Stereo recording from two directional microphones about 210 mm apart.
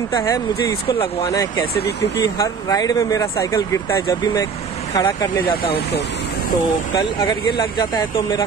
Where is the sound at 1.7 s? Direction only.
50° left (ahead or behind).